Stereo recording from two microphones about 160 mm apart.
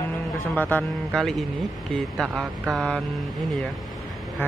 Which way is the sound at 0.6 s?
10° left (ahead or behind).